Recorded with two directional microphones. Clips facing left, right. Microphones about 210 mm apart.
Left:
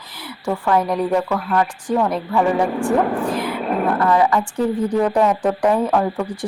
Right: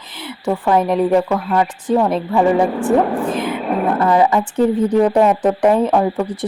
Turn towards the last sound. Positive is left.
turn(degrees=-20)  # may be behind; listen again after turning